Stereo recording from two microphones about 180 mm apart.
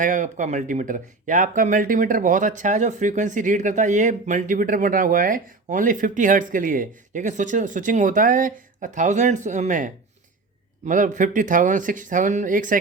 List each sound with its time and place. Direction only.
0.0 s speech: 45° right (ahead or behind)